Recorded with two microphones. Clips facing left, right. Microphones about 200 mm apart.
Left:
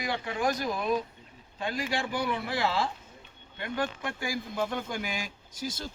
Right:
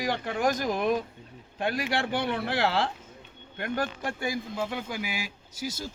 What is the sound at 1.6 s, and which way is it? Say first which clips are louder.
Speech: right 3 dB; 65° right (ahead or behind).